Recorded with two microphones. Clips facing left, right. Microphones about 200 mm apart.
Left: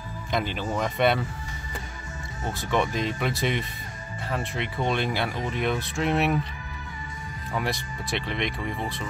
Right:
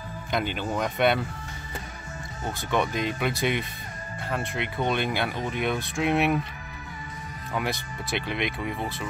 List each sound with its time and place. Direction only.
0.3 s speech: centre (ahead or behind)
2.4 s speech: centre (ahead or behind)
7.5 s speech: centre (ahead or behind)